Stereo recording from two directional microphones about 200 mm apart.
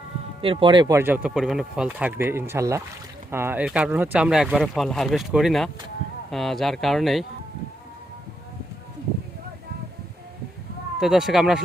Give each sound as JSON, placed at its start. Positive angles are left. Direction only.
{"t": 0.4, "sound": "speech", "side_deg": -25}
{"t": 11.0, "sound": "speech", "side_deg": 0}